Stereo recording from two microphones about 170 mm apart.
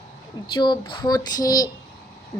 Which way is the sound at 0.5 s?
30° left (ahead or behind).